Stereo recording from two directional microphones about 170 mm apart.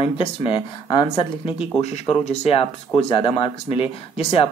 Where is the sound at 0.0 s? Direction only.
30° left (ahead or behind).